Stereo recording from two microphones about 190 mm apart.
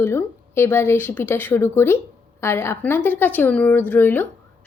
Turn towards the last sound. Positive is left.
turn(degrees=10)  # may be behind; listen again after turning